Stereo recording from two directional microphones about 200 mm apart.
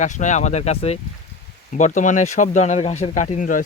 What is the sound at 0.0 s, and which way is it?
Speech, 35° left (ahead or behind).